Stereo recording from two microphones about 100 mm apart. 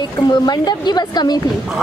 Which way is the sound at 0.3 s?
45° left (ahead or behind).